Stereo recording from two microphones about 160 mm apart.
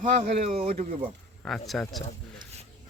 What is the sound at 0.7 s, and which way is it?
Speech, 55° right (ahead or behind).